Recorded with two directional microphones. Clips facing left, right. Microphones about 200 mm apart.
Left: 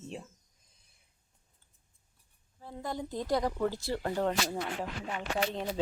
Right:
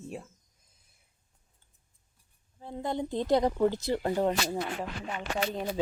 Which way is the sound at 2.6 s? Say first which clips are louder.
Right 5 dB; 20° right (ahead or behind).